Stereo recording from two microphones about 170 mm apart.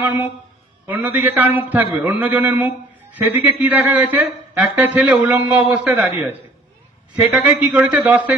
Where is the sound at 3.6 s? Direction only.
10° right (ahead or behind).